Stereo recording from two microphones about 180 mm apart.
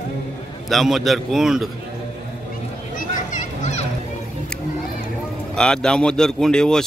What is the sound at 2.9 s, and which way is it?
Children playing, 45° left (ahead or behind).